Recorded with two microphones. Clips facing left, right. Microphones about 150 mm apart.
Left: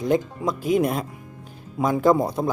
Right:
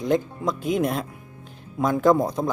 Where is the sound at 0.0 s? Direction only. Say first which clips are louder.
Left 1 dB; 5° left (ahead or behind).